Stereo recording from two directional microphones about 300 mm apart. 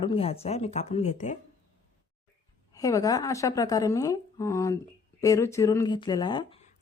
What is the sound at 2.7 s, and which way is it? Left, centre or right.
Speech, centre.